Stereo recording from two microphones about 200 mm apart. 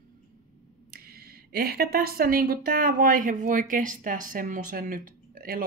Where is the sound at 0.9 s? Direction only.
50° right (ahead or behind).